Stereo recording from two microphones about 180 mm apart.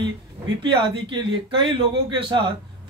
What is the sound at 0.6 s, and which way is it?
A man's voice, 30° right (ahead or behind).